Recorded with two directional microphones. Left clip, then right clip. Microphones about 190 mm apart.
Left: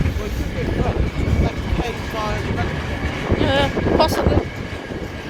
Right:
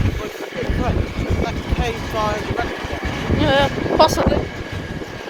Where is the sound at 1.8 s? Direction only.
40° right (ahead or behind).